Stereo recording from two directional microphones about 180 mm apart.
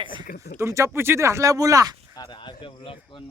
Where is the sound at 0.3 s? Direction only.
60° left (ahead or behind).